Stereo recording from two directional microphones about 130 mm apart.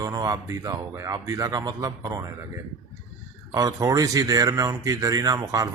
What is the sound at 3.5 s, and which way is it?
A man's voice, 25° right (ahead or behind).